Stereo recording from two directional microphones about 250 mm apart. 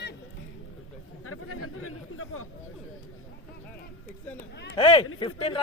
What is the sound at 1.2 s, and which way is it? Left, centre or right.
Speech, left.